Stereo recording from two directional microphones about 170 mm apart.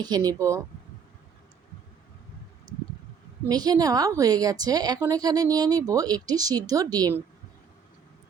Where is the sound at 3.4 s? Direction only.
25° right (ahead or behind).